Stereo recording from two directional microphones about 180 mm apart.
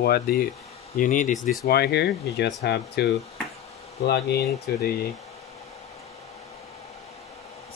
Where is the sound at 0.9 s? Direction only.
45° left (ahead or behind).